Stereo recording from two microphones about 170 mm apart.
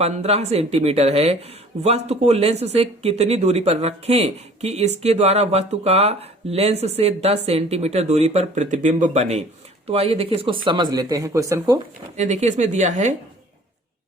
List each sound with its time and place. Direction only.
0.0 s speech: 40° right (ahead or behind); by 11.8 s 20° right (ahead or behind)
12.1 s speech: 45° right (ahead or behind)